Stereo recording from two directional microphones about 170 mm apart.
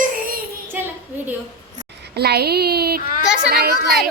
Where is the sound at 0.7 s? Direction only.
10° right (ahead or behind).